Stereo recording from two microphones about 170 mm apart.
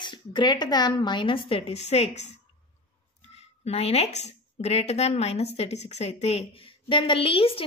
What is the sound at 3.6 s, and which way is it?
A woman's voice, 35° left (ahead or behind).